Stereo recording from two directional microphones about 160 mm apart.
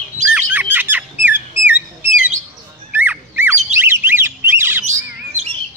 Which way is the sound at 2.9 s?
10° right (ahead or behind).